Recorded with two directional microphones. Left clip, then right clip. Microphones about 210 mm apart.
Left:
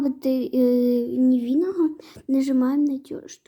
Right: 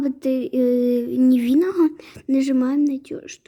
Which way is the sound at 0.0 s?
10° right (ahead or behind).